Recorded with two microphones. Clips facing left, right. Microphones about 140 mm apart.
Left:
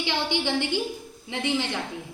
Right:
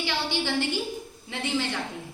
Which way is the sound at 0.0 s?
20° left (ahead or behind).